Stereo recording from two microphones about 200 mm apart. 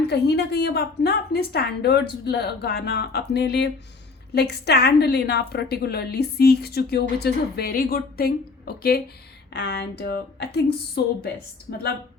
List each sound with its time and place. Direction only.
0.1 s a woman's voice: 55° left (ahead or behind)